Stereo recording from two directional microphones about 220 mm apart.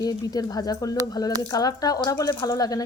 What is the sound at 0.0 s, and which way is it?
Speech, 15° left (ahead or behind).